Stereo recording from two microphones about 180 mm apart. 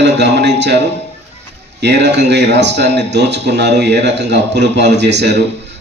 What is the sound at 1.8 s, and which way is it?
Speech, 70° right (ahead or behind).